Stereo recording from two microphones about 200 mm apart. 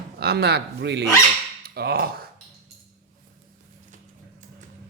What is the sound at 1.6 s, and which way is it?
Speech, 50° right (ahead or behind).